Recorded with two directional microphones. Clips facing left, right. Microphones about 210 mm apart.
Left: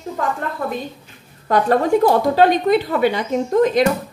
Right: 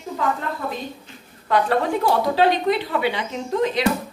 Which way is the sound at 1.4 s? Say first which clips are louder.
Left 3 dB; 45° left (ahead or behind).